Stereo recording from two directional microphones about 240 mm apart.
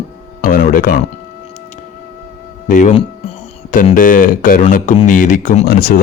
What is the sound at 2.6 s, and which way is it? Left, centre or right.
Speech, left.